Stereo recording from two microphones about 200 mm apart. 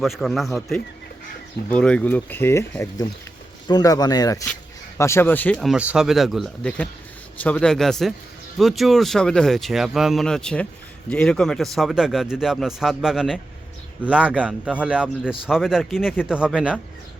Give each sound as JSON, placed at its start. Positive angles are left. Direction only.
{"t": 0.0, "sound": "speech", "side_deg": 0}